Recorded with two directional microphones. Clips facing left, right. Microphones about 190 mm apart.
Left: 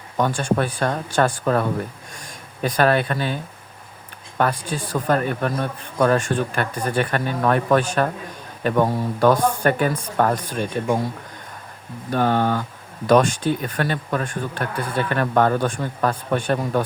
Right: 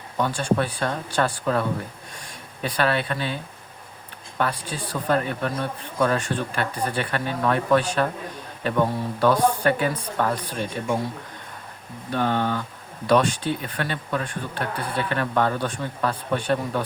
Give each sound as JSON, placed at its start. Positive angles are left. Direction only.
{"t": 0.2, "sound": "speech", "side_deg": 50}
{"t": 4.4, "sound": "speech", "side_deg": 50}
{"t": 12.1, "sound": "speech", "side_deg": 45}